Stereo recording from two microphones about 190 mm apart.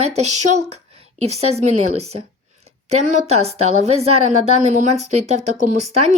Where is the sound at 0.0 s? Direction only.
35° right (ahead or behind).